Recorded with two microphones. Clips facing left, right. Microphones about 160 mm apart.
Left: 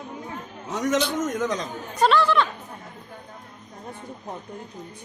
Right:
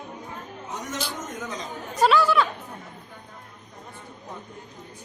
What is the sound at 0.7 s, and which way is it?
Speech, 90° left.